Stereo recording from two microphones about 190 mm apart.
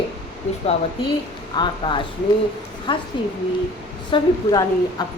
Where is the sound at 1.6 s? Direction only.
25° left (ahead or behind).